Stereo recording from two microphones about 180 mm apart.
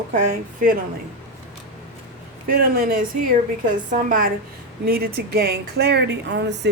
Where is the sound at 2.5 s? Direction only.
55° right (ahead or behind).